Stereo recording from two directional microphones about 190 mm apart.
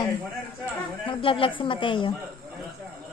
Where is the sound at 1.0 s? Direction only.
30° left (ahead or behind).